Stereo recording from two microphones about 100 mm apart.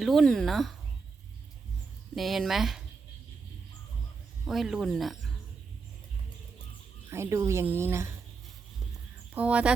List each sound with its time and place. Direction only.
0.0 s speech: centre (ahead or behind)
2.1 s speech: centre (ahead or behind)
4.4 s speech: 5° right (ahead or behind)
7.1 s speech: 30° right (ahead or behind)
9.3 s speech: 15° right (ahead or behind)